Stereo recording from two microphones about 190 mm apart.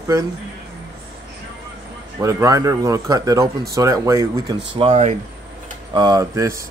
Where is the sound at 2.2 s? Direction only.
15° right (ahead or behind).